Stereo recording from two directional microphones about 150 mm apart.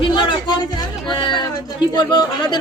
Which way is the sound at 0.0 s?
30° left (ahead or behind).